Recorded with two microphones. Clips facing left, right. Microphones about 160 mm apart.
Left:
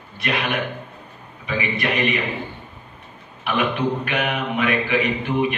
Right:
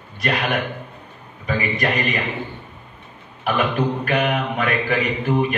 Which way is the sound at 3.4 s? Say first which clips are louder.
Right 1 dB; 40° right (ahead or behind).